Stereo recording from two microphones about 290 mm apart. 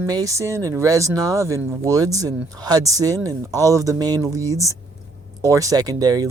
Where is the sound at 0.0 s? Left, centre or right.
Centre.